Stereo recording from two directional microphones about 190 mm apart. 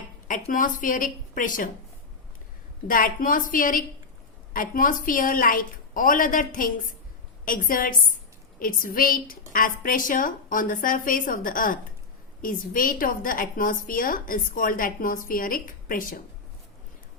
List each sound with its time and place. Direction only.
0.3 s a woman's voice: 45° left (ahead or behind)
2.8 s a woman's voice: 45° left (ahead or behind)